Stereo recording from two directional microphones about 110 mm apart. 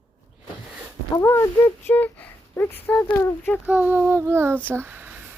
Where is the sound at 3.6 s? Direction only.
15° right (ahead or behind).